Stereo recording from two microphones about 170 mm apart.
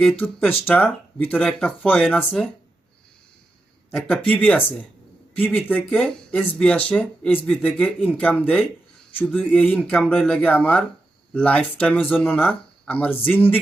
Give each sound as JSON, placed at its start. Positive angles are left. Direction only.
{"t": 0.0, "sound": "speech", "side_deg": 5}
{"t": 3.9, "sound": "speech", "side_deg": 5}